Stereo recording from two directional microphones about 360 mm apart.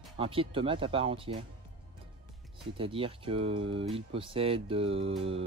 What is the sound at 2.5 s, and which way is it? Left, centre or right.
Speech, centre.